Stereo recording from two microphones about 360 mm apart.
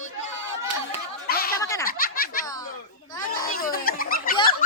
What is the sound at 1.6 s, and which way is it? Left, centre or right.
Snicker, centre.